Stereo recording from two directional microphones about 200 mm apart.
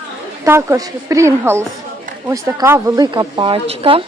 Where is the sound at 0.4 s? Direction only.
10° right (ahead or behind); by 4.0 s 30° right (ahead or behind).